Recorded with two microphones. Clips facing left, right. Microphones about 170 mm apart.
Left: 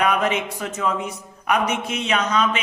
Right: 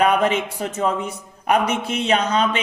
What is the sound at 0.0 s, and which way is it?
A man's voice, 30° right (ahead or behind).